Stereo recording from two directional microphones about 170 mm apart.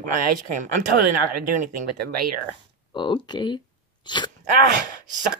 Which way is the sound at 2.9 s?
30° left (ahead or behind).